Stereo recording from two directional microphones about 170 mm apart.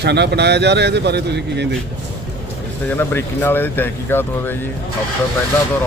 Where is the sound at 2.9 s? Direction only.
15° left (ahead or behind).